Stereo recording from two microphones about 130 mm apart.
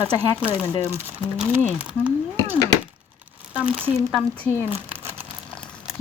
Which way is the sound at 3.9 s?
5° left (ahead or behind).